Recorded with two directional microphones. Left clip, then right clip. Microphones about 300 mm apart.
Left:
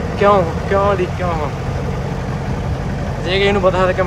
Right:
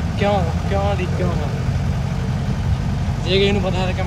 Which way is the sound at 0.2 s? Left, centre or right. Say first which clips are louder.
Left 7 dB; centre.